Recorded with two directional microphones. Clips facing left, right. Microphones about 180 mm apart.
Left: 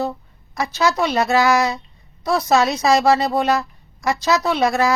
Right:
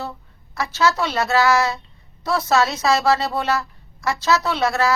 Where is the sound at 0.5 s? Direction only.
15° left (ahead or behind).